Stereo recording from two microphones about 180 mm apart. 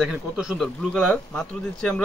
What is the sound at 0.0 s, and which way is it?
Speech, 5° right (ahead or behind).